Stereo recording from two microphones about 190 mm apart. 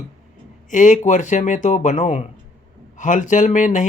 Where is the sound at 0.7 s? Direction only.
40° left (ahead or behind).